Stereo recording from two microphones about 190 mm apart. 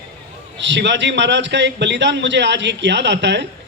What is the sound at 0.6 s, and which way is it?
A man's voice, 70° right (ahead or behind).